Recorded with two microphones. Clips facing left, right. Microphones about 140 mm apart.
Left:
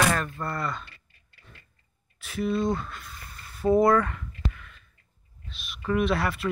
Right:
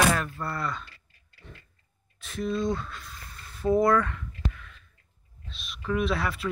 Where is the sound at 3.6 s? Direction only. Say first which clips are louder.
Left 2 dB; 5° left (ahead or behind).